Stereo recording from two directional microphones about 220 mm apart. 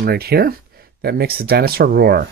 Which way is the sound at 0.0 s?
45° right (ahead or behind).